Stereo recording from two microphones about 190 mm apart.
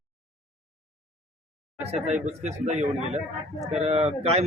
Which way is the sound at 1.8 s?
35° right (ahead or behind).